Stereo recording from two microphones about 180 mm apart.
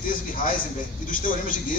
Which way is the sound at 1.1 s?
50° left (ahead or behind).